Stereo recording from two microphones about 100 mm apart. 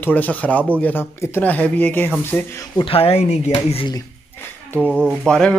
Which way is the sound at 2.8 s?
70° left (ahead or behind).